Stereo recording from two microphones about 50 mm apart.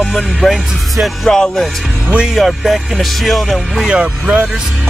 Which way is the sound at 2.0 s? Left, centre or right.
Centre.